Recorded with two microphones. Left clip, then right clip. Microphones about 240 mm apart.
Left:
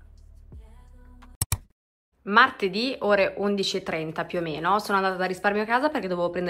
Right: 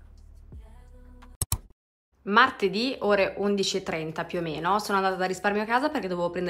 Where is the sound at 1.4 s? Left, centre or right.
Centre.